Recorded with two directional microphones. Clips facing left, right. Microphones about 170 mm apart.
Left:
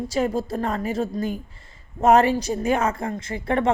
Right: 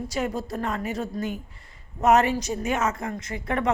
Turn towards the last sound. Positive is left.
turn(degrees=30)  # may be behind; listen again after turning